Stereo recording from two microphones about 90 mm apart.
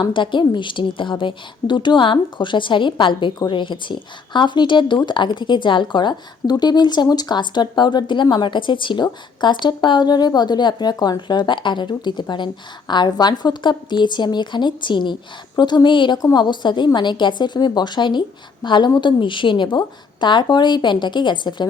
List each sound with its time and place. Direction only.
0.0 s a woman's voice: 60° left (ahead or behind)